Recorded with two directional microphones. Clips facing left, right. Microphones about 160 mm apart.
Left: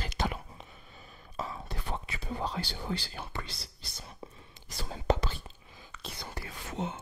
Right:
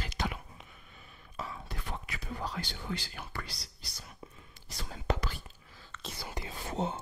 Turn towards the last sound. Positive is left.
turn(degrees=-35)  # may be behind; listen again after turning